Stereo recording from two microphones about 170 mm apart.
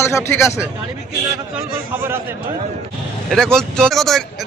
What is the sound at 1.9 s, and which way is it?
Speech, 15° right (ahead or behind).